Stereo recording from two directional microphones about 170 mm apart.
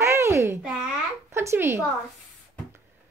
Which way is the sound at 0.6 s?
5° right (ahead or behind).